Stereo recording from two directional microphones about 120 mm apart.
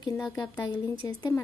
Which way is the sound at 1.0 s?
35° left (ahead or behind).